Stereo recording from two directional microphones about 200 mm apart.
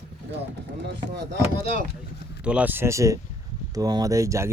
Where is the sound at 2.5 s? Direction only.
5° right (ahead or behind).